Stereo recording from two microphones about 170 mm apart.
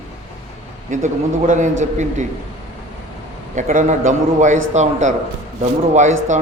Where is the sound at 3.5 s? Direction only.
45° right (ahead or behind).